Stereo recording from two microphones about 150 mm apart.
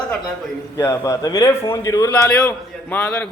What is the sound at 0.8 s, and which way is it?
A man's voice, 20° left (ahead or behind).